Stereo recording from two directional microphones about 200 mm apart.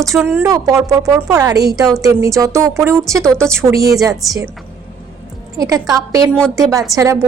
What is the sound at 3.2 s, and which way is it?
Speech, 5° left (ahead or behind).